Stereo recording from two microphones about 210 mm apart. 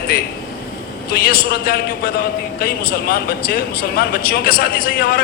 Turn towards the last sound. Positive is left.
turn(degrees=45)  # may be behind; listen again after turning